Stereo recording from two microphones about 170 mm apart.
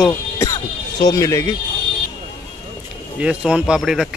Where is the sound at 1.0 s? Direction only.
20° left (ahead or behind).